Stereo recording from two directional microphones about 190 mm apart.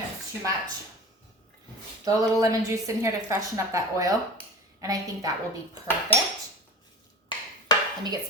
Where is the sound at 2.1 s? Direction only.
15° right (ahead or behind).